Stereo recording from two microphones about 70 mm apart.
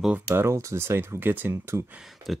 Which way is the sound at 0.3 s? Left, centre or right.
Right.